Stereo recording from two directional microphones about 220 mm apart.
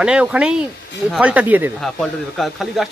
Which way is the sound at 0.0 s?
5° right (ahead or behind).